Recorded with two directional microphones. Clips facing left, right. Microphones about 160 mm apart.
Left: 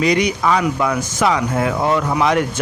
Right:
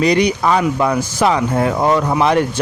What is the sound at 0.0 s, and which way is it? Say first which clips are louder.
Speech: right 2 dB; 35° right (ahead or behind).